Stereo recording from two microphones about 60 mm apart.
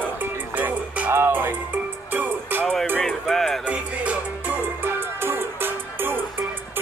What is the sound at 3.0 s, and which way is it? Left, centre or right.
Music, centre.